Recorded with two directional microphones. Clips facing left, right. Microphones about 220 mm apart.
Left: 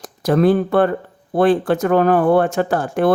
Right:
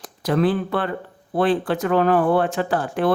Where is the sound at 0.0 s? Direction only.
45° left (ahead or behind).